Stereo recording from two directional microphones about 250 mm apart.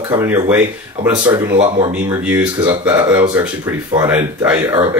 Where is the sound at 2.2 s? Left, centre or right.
Centre.